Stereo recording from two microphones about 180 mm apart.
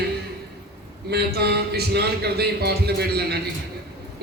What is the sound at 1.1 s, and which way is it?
A man's voice, 65° right (ahead or behind).